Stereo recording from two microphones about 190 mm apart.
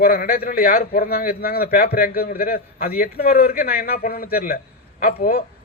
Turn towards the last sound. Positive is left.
turn(degrees=50)  # may be behind; listen again after turning